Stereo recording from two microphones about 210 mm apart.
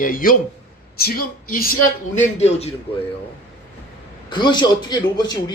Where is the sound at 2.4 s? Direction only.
30° left (ahead or behind).